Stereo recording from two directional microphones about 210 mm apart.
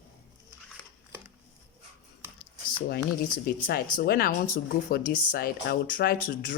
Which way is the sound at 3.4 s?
45° left (ahead or behind).